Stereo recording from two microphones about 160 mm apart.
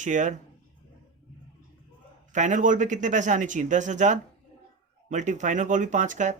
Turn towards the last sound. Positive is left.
turn(degrees=-50)  # may be behind; listen again after turning